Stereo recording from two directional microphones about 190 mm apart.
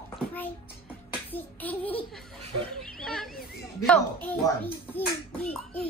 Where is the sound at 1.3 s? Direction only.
10° left (ahead or behind).